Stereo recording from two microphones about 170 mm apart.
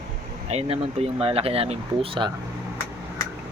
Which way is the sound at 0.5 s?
35° right (ahead or behind).